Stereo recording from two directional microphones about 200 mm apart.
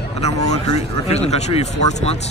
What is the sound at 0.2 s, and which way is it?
Speech, 30° left (ahead or behind).